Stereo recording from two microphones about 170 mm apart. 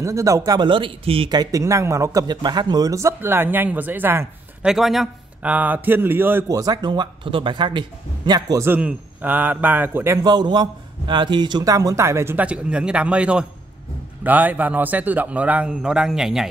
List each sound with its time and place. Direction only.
0.0 s speech: 20° right (ahead or behind)
4.6 s a man's voice: centre (ahead or behind)